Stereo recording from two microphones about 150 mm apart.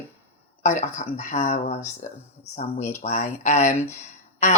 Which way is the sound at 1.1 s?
75° left (ahead or behind).